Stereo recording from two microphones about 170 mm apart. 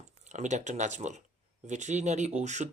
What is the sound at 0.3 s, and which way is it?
Speech, 45° right (ahead or behind).